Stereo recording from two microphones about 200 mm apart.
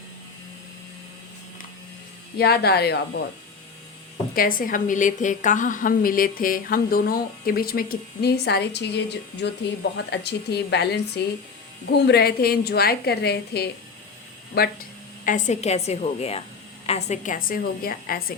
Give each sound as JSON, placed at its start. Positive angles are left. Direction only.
{"t": 2.4, "sound": "a woman's voice", "side_deg": 50}
{"t": 4.4, "sound": "a woman's voice", "side_deg": 45}